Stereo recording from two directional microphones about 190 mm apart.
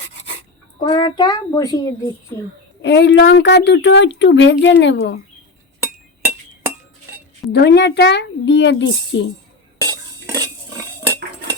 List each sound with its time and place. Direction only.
0.8 s a child's voice: 25° left (ahead or behind)
2.8 s speech: 70° left (ahead or behind)
6.2 s chink: 10° right (ahead or behind)
7.5 s speech: 60° left (ahead or behind)
9.8 s cutlery: 20° right (ahead or behind)